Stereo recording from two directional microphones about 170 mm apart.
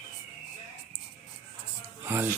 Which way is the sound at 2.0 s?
10° right (ahead or behind).